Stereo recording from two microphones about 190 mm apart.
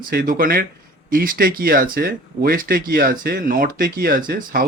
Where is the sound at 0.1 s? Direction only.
50° right (ahead or behind).